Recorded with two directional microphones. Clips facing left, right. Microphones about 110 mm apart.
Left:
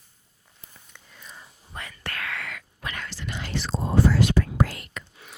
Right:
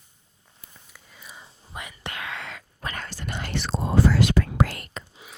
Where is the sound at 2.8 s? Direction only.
40° right (ahead or behind); by 4.8 s 70° right (ahead or behind).